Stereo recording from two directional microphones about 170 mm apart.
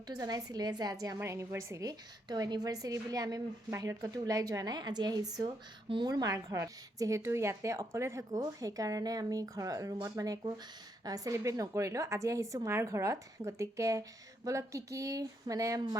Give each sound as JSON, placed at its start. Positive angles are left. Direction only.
{"t": 0.1, "sound": "a woman's voice", "side_deg": -20}